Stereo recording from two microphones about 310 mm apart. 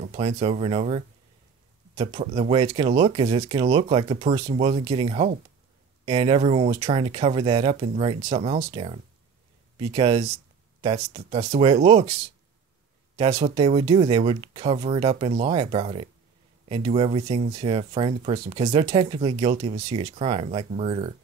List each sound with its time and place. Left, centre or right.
0.0 s speech: centre